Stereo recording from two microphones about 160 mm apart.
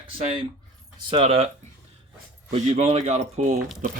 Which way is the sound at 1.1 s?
35° right (ahead or behind).